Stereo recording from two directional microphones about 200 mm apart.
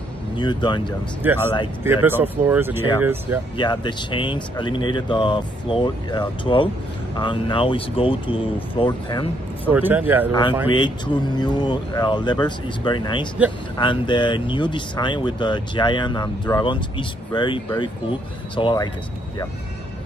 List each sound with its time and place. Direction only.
0.4 s speech: 20° left (ahead or behind)
1.2 s speech: 10° right (ahead or behind)
3.5 s speech: 20° left (ahead or behind)
9.7 s speech: 10° right (ahead or behind)
10.7 s speech: 25° left (ahead or behind)